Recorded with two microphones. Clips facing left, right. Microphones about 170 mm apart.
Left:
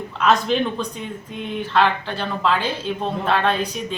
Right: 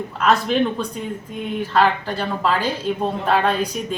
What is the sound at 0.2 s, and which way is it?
Speech, centre (ahead or behind).